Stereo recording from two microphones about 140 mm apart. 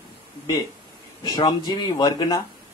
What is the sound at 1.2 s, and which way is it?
A man's voice, 30° left (ahead or behind).